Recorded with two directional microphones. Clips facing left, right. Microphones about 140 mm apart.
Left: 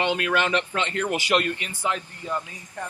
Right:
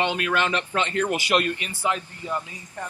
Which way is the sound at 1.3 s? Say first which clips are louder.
Even; 15° right (ahead or behind).